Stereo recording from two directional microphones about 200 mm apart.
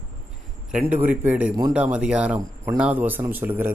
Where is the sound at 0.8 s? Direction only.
10° right (ahead or behind).